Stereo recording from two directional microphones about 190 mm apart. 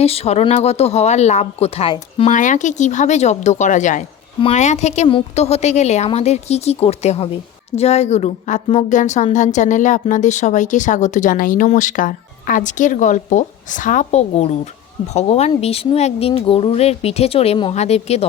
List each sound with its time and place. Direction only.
0.0 s speech: 30° left (ahead or behind)